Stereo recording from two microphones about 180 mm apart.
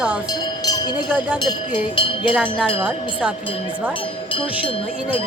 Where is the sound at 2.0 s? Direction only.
30° left (ahead or behind).